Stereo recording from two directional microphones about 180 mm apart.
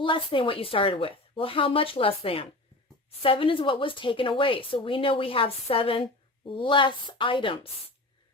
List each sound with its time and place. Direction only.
0.0 s a woman's voice: 30° left (ahead or behind)